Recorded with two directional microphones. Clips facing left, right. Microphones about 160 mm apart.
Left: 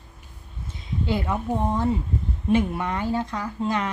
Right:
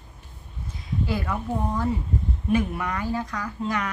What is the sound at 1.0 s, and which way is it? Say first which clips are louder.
Speech: left 3 dB; 20° left (ahead or behind).